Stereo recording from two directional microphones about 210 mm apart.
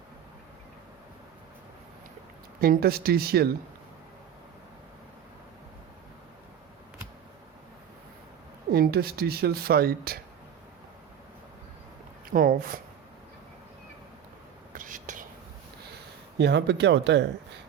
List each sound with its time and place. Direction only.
2.6 s speech: 45° right (ahead or behind)
8.7 s speech: 45° right (ahead or behind)
12.3 s speech: 40° right (ahead or behind)
14.7 s whispering: 40° right (ahead or behind)
16.4 s speech: 55° right (ahead or behind)